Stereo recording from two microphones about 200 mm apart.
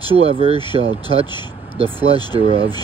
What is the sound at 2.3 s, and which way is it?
Speech, 25° right (ahead or behind).